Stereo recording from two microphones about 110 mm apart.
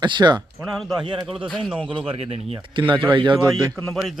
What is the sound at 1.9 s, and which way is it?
Speech, 55° right (ahead or behind).